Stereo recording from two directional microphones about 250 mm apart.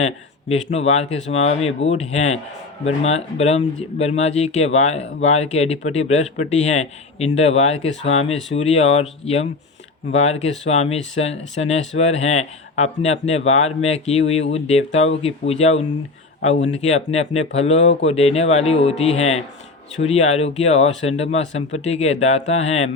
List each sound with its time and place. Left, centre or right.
0.0 s speech: left